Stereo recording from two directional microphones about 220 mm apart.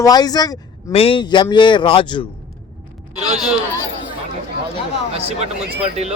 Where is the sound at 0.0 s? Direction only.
15° left (ahead or behind).